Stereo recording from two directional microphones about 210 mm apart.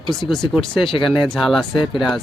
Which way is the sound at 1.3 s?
Centre (ahead or behind).